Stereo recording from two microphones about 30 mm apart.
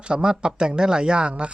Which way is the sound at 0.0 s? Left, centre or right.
Right.